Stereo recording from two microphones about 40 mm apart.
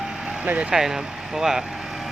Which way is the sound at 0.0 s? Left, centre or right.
Centre.